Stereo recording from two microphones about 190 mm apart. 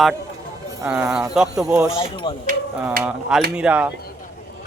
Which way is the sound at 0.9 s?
5° right (ahead or behind).